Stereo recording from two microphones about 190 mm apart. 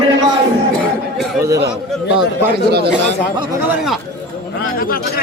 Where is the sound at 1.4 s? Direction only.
15° right (ahead or behind).